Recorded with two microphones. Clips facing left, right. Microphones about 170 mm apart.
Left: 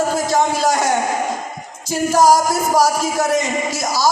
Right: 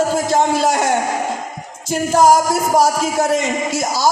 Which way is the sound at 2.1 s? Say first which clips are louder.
Right 1 dB; 25° right (ahead or behind).